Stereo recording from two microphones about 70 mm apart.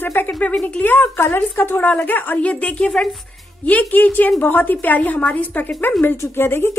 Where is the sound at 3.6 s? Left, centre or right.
Left.